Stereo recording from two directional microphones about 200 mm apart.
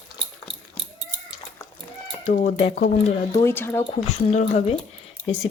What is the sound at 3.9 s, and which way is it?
Speech, 35° left (ahead or behind).